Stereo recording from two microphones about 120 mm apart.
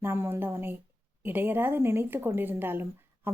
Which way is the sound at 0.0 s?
20° right (ahead or behind).